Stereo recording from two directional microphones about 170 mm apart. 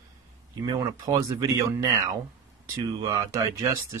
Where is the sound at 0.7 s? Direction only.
25° right (ahead or behind).